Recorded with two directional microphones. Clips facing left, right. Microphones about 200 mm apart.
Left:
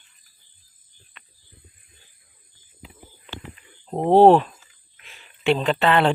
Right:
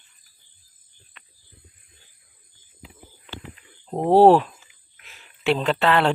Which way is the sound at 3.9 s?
5° right (ahead or behind).